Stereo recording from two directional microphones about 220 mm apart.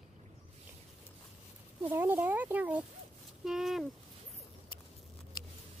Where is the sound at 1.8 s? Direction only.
10° right (ahead or behind).